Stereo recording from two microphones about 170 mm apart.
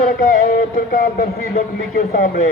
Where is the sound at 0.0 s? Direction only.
50° left (ahead or behind).